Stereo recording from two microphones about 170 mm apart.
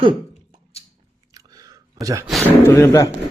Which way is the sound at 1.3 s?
20° right (ahead or behind).